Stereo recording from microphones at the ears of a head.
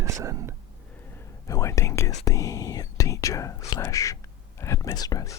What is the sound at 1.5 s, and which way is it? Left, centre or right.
Speech, left.